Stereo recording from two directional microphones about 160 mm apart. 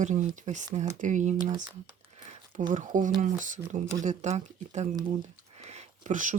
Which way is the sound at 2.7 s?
50° right (ahead or behind).